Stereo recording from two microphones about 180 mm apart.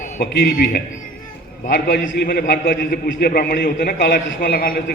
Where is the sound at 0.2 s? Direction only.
55° left (ahead or behind).